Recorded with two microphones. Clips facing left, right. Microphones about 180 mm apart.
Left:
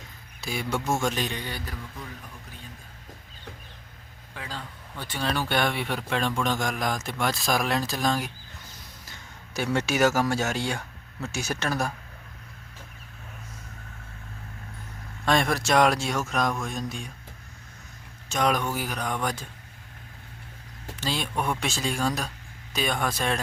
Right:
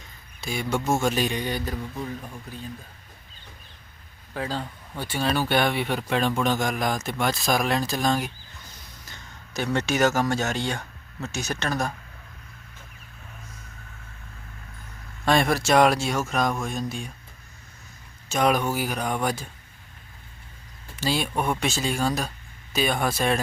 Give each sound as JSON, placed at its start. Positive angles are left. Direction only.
{"t": 0.4, "sound": "a man's voice", "side_deg": 0}
{"t": 4.4, "sound": "a man's voice", "side_deg": -35}
{"t": 4.9, "sound": "a man's voice", "side_deg": -10}
{"t": 9.6, "sound": "speech", "side_deg": 10}
{"t": 15.2, "sound": "a man's voice", "side_deg": -5}
{"t": 18.3, "sound": "speech", "side_deg": -5}
{"t": 21.0, "sound": "a man's voice", "side_deg": -10}